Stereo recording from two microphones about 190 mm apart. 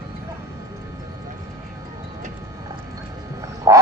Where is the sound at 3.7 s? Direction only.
20° right (ahead or behind).